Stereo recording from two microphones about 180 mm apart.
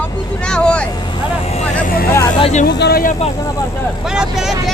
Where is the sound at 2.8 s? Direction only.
60° left (ahead or behind).